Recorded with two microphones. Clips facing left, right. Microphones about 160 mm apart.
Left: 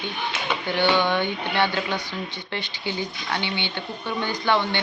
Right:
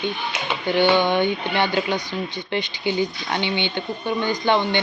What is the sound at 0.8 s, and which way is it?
Speech, 15° right (ahead or behind).